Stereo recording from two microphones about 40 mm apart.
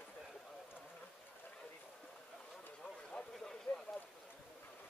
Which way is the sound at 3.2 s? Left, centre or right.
Centre.